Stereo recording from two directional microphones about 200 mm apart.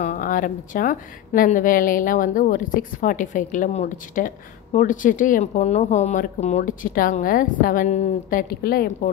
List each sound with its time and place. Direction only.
0.0 s speech: 45° left (ahead or behind)